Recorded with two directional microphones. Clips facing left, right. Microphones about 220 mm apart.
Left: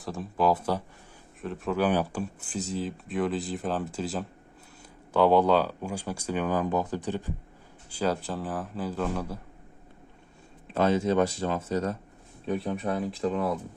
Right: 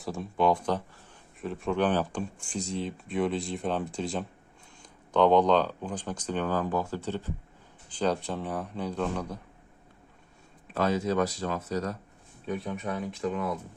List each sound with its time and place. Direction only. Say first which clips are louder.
0.0 s speech: even; centre (ahead or behind)
10.8 s speech: left 3 dB; 25° left (ahead or behind)